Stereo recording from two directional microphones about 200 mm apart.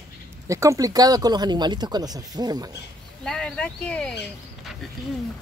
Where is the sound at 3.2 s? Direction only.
5° left (ahead or behind).